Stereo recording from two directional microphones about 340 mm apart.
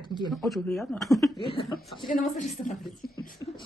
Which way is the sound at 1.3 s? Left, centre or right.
Centre.